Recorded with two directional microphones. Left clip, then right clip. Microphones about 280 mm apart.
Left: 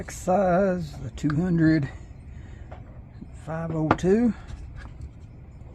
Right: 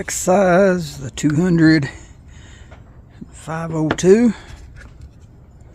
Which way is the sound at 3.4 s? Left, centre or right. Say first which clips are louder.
Right 7 dB; right.